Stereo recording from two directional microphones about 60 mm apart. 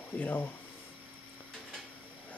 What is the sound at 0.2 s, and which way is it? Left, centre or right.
Speech, left.